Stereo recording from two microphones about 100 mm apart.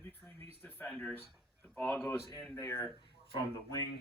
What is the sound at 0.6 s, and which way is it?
Speech, 15° left (ahead or behind).